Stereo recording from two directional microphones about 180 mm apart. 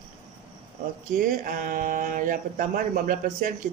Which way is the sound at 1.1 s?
50° right (ahead or behind).